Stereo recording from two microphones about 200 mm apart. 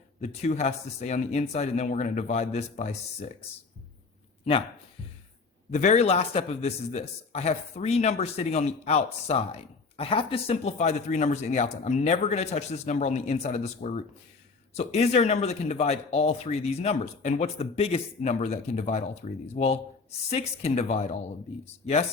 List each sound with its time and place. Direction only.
0.2 s speech: 35° left (ahead or behind)
5.7 s speech: 35° left (ahead or behind)